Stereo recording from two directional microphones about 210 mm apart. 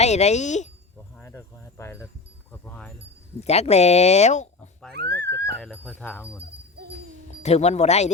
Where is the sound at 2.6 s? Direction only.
5° left (ahead or behind).